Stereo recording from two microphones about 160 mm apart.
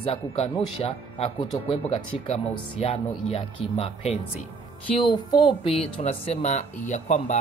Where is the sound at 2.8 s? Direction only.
40° left (ahead or behind).